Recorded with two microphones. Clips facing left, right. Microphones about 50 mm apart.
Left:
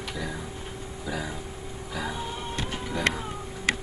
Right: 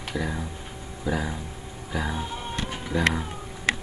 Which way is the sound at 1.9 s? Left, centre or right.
Centre.